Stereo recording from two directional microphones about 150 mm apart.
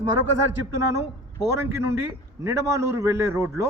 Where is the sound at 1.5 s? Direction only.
15° right (ahead or behind).